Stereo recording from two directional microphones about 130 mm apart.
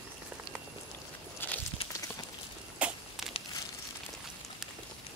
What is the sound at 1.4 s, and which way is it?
Walk, 15° left (ahead or behind).